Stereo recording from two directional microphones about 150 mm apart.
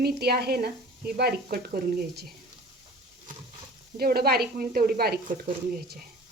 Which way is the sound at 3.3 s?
60° right (ahead or behind).